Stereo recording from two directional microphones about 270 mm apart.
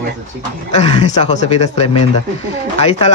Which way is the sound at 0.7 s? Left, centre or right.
Left.